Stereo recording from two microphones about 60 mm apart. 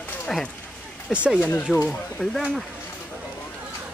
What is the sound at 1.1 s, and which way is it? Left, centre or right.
Speech, centre.